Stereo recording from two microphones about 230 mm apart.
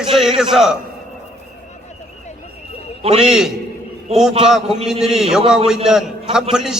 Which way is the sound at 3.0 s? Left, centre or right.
Right.